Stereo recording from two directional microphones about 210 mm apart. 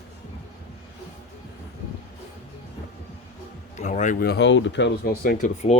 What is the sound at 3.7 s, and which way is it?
Speech, 35° left (ahead or behind).